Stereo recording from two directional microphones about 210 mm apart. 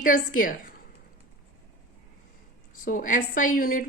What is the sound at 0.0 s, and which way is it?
Speech, 40° left (ahead or behind).